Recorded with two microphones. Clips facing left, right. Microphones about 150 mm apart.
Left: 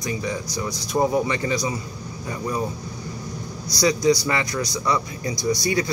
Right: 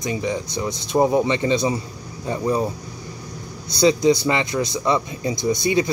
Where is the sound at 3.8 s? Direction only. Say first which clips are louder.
Right 3 dB; 25° right (ahead or behind).